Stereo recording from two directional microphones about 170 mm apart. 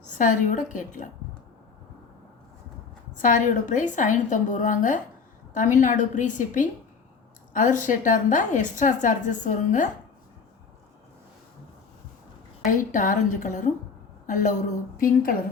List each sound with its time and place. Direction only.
0.2 s a woman's voice: 50° left (ahead or behind)
3.2 s a woman's voice: 50° left (ahead or behind)
12.7 s a woman's voice: 50° left (ahead or behind)
14.9 s a woman's voice: 55° left (ahead or behind)